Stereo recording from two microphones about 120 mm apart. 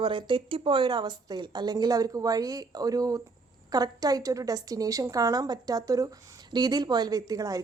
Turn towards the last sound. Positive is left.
turn(degrees=-30)  # may be behind; listen again after turning